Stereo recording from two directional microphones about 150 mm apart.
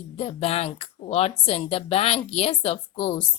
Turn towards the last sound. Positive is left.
turn(degrees=40)  # may be behind; listen again after turning